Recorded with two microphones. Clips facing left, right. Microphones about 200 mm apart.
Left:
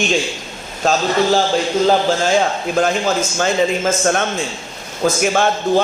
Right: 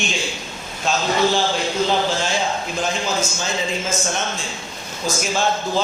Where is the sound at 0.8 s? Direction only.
40° left (ahead or behind).